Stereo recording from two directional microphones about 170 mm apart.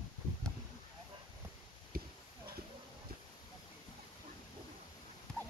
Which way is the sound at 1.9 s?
60° right (ahead or behind).